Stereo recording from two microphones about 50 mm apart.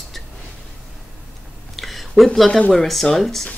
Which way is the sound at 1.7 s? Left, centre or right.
Centre.